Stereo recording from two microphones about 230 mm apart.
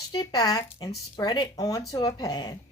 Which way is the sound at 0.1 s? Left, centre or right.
Centre.